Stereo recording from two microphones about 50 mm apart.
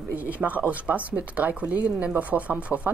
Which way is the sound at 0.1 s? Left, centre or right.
Right.